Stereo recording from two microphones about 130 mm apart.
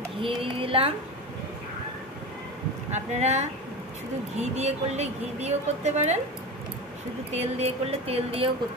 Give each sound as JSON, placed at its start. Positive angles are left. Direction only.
{"t": 0.2, "sound": "speech", "side_deg": -45}
{"t": 2.9, "sound": "a woman's voice", "side_deg": -60}
{"t": 7.3, "sound": "speech", "side_deg": -55}